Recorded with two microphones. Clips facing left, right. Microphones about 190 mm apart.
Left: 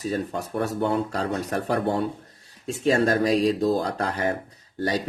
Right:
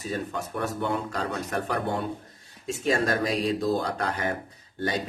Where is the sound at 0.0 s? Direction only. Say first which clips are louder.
Left 4 dB; 40° left (ahead or behind).